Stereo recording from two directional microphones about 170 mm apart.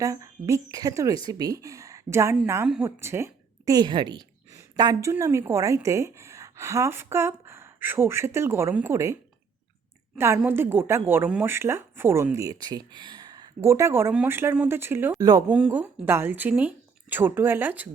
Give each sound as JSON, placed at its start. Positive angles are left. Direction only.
{"t": 0.0, "sound": "a woman's voice", "side_deg": -20}
{"t": 2.6, "sound": "speech", "side_deg": -5}
{"t": 3.0, "sound": "a woman's voice", "side_deg": -15}
{"t": 10.2, "sound": "a woman's voice", "side_deg": -15}
{"t": 15.4, "sound": "speech", "side_deg": -10}